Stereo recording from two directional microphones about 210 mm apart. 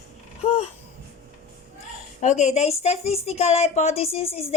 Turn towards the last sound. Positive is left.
turn(degrees=30)  # may be behind; listen again after turning